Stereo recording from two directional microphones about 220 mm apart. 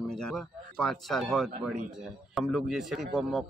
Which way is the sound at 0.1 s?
Centre (ahead or behind).